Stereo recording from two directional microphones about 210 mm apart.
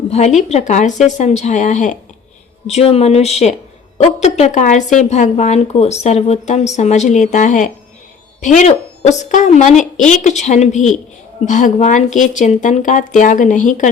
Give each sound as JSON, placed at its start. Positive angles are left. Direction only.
{"t": 0.1, "sound": "speech", "side_deg": 35}